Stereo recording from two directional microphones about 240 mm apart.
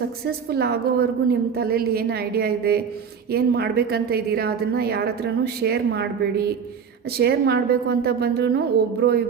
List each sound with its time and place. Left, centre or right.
0.3 s a woman's voice: right